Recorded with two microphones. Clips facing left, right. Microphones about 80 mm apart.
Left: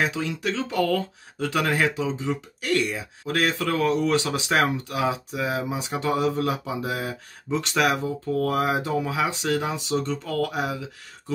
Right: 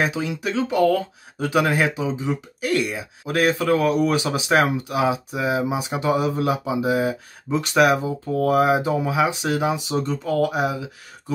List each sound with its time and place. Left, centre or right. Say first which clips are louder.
0.0 s speech: right 2 dB; centre